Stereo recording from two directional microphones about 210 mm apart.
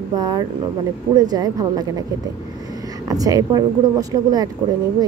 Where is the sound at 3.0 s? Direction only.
15° right (ahead or behind).